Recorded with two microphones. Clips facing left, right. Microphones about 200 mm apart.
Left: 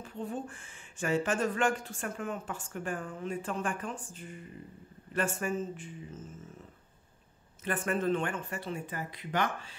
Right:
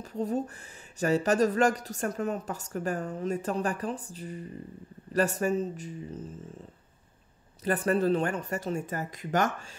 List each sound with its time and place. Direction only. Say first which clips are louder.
0.0 s speech: right 7 dB; 40° right (ahead or behind)